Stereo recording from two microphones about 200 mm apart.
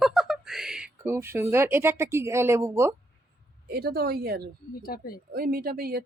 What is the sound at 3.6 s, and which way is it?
Speech, 50° right (ahead or behind).